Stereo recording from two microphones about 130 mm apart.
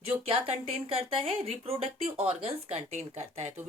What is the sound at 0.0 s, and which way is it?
Speech, 45° right (ahead or behind).